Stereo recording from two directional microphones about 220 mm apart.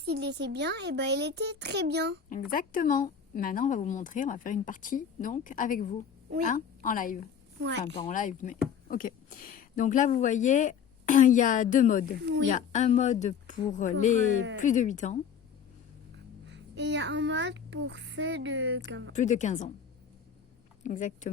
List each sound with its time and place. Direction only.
0.0 s a child's voice: 50° right (ahead or behind)
2.5 s speech: 40° left (ahead or behind)
7.6 s a child's voice: 50° right (ahead or behind)
8.0 s speech: 35° left (ahead or behind)
12.2 s a child's voice: 55° right (ahead or behind)
12.5 s speech: 35° left (ahead or behind)
16.5 s a child's voice: 55° right (ahead or behind)
19.1 s speech: 35° left (ahead or behind)
20.8 s speech: 35° left (ahead or behind)